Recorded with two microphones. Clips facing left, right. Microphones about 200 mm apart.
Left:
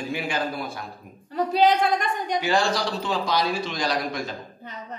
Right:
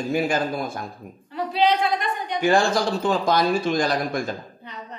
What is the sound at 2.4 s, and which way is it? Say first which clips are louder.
Speech: right 6 dB; 50° right (ahead or behind).